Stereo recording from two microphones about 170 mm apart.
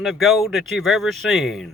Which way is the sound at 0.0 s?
Centre (ahead or behind).